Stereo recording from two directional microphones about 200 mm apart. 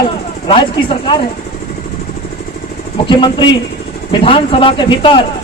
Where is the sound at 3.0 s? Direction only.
25° left (ahead or behind).